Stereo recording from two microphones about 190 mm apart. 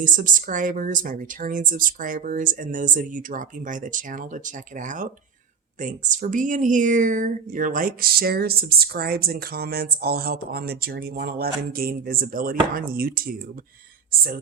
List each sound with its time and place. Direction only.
0.0 s a woman's voice: 45° right (ahead or behind)